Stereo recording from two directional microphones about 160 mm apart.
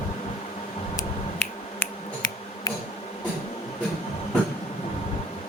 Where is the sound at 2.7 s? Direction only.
25° left (ahead or behind).